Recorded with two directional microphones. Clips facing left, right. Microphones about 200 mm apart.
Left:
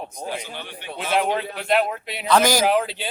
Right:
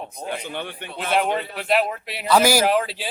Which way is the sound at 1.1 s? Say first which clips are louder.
Even; centre (ahead or behind).